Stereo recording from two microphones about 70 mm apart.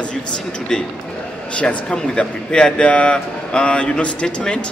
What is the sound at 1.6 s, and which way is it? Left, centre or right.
A man's voice, centre.